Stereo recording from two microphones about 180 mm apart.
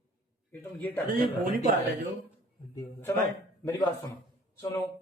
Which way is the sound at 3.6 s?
15° left (ahead or behind).